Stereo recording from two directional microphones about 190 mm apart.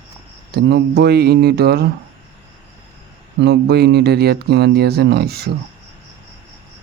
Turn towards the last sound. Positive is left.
turn(degrees=-55)  # may be behind; listen again after turning